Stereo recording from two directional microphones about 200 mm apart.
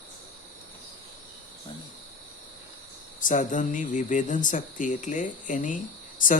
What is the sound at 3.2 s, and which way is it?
Speech, 40° left (ahead or behind).